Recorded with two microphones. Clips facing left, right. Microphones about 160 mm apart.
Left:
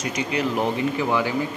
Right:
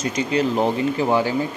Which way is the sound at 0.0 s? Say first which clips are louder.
Right 4 dB; 30° right (ahead or behind).